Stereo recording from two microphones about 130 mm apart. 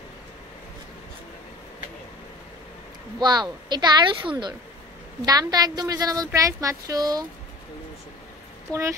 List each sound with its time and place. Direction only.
3.2 s a woman's voice: 35° right (ahead or behind)
8.7 s a woman's voice: 10° left (ahead or behind)